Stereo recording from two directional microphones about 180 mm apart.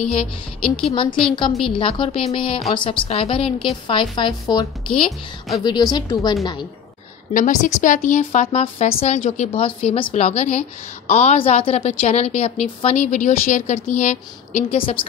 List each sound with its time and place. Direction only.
0.6 s a woman's voice: 5° left (ahead or behind)
1.3 s a woman's voice: 25° left (ahead or behind)
7.3 s speech: 45° left (ahead or behind)